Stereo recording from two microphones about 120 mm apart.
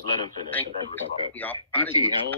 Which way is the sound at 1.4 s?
15° left (ahead or behind).